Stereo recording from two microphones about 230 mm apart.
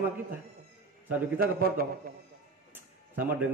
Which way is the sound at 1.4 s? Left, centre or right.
Right.